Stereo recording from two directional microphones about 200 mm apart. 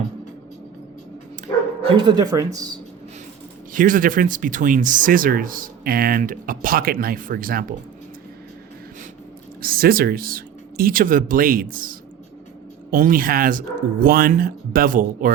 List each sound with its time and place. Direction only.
1.8 s speech: 20° right (ahead or behind)
3.7 s speech: 40° right (ahead or behind)
9.6 s speech: 45° right (ahead or behind)